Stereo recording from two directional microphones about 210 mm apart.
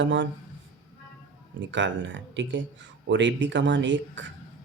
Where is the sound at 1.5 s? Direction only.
60° right (ahead or behind).